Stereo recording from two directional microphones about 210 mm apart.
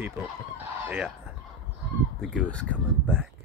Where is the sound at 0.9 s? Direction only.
Centre (ahead or behind).